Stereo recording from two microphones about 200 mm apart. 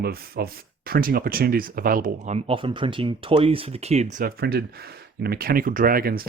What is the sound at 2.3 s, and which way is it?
Speech, 25° right (ahead or behind).